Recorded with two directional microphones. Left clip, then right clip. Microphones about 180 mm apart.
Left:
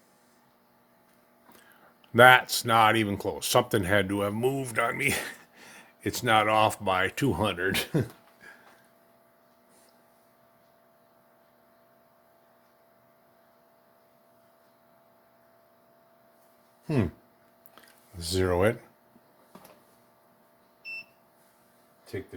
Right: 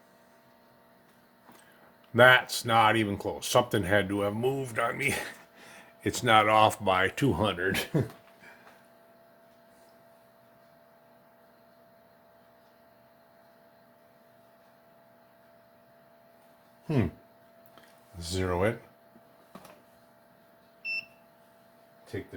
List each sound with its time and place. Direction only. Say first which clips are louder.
2.1 s speech: left 3 dB; 55° left (ahead or behind); by 8.0 s 35° left (ahead or behind)
16.8 s speech: left 1 dB; 60° left (ahead or behind)
18.2 s speech: left 4 dB; 55° left (ahead or behind)